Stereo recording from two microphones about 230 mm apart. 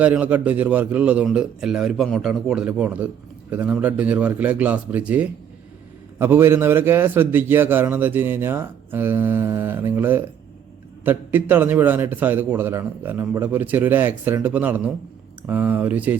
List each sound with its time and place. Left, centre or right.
0.0 s a man's voice: centre